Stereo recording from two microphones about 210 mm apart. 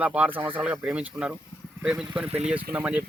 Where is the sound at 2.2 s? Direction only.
30° right (ahead or behind).